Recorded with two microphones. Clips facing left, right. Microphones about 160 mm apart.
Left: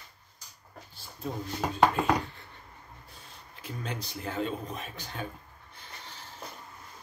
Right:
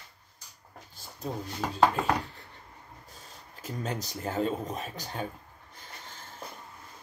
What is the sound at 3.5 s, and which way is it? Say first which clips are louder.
Speech: right 3 dB; 40° right (ahead or behind).